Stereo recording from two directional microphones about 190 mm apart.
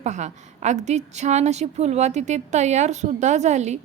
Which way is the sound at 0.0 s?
40° right (ahead or behind).